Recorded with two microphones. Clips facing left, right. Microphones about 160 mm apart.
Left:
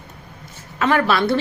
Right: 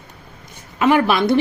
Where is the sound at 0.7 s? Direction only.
15° right (ahead or behind).